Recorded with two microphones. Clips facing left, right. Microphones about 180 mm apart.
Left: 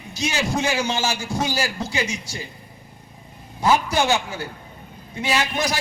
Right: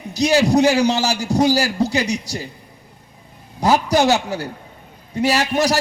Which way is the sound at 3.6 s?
40° right (ahead or behind).